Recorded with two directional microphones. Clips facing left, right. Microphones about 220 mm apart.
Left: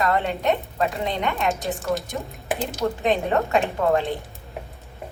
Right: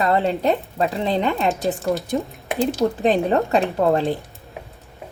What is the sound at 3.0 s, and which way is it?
Speech, 35° right (ahead or behind).